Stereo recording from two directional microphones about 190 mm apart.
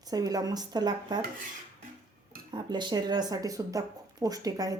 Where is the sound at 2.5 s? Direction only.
25° right (ahead or behind).